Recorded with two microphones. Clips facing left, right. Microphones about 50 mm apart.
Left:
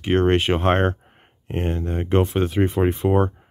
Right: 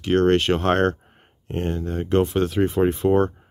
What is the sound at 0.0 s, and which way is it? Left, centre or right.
Speech, centre.